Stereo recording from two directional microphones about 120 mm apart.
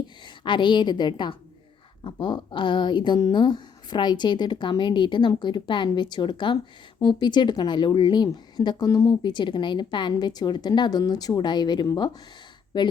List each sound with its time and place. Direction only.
0.3 s speech: 40° left (ahead or behind)
9.2 s speech: 40° left (ahead or behind)